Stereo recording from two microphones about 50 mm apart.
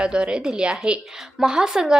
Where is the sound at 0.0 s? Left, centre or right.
Centre.